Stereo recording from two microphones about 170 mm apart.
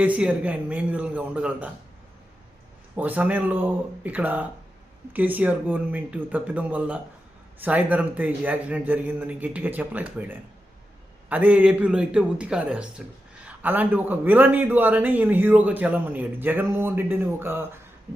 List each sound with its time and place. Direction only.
0.0 s a man's voice: 10° right (ahead or behind)
2.9 s a man's voice: 10° right (ahead or behind)